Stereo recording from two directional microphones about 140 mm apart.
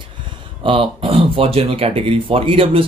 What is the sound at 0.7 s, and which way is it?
Speech, 40° right (ahead or behind).